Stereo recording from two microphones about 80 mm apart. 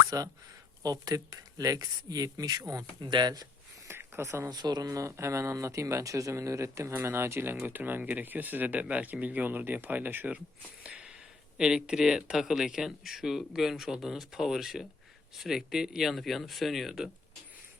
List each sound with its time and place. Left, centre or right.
0.1 s speech: right
3.0 s speech: right
3.8 s a sound: right
4.4 s speech: right
11.5 s speech: centre